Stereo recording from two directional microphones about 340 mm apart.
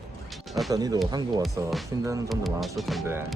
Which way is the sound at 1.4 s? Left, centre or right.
Centre.